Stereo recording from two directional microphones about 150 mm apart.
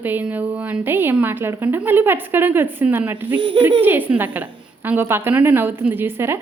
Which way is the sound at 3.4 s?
35° right (ahead or behind).